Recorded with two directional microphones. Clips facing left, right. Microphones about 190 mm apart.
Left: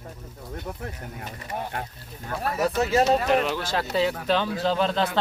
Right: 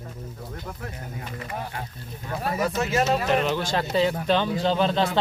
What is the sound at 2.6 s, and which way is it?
Speech, 35° left (ahead or behind).